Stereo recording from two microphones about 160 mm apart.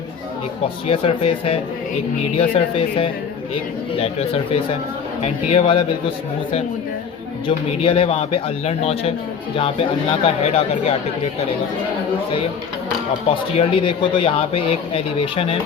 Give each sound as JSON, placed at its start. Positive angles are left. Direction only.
{"t": 0.9, "sound": "speech", "side_deg": 35}
{"t": 10.2, "sound": "speech", "side_deg": 40}
{"t": 13.3, "sound": "speech", "side_deg": 35}